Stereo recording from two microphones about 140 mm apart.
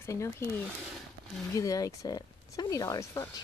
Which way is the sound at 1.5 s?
25° left (ahead or behind).